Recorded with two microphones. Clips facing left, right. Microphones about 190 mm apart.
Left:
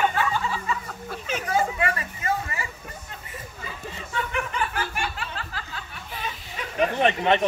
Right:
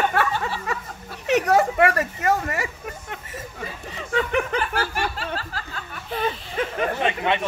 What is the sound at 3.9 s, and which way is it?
Snicker, 70° right (ahead or behind).